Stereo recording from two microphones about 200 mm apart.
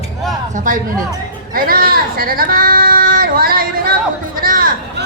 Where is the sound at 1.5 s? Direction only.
45° right (ahead or behind).